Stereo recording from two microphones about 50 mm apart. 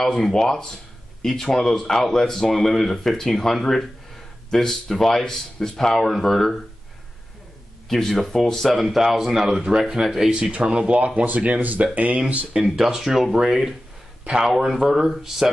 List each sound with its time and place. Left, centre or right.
0.1 s speech: centre
7.9 s speech: centre
10.3 s speech: right
12.6 s a man's voice: centre